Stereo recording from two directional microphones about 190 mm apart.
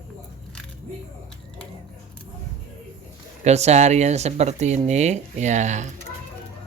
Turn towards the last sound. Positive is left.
turn(degrees=-40)  # may be behind; listen again after turning